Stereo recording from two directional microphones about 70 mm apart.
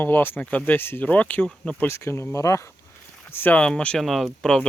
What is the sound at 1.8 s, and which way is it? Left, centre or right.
Speech, left.